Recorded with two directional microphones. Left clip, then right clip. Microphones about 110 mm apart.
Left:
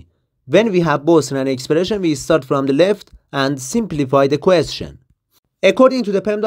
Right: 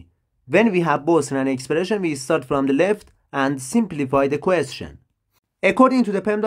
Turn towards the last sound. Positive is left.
turn(degrees=25)  # may be behind; listen again after turning